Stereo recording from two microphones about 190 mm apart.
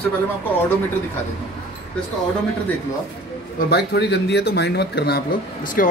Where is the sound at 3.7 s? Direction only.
60° left (ahead or behind).